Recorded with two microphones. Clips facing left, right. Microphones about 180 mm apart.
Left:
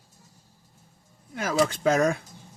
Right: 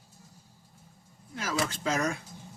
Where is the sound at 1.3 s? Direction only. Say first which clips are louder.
Left 7 dB; 55° left (ahead or behind).